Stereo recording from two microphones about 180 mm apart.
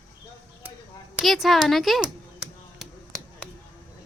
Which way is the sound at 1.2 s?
Centre (ahead or behind).